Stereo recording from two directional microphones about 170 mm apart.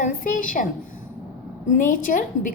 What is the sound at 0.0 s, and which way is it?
Speech, 50° left (ahead or behind).